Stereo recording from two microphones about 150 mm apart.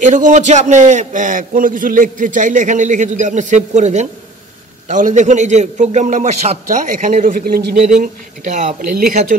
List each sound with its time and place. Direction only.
0.0 s a man's voice: 55° right (ahead or behind); by 7.7 s 90° right
7.9 s a man's voice: 55° right (ahead or behind)